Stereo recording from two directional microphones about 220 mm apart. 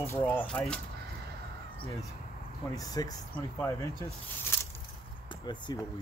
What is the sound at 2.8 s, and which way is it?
Speech, 15° left (ahead or behind).